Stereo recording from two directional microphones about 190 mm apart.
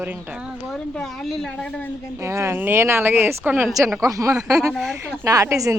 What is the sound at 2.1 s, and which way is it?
A woman's voice, 15° right (ahead or behind).